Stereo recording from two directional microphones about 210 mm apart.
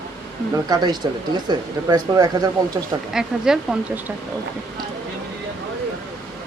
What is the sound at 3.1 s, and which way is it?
Speech, 5° right (ahead or behind).